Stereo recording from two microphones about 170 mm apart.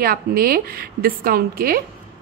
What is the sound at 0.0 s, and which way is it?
A woman's voice, 60° right (ahead or behind).